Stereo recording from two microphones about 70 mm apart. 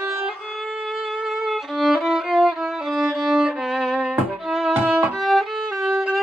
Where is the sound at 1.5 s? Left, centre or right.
Centre.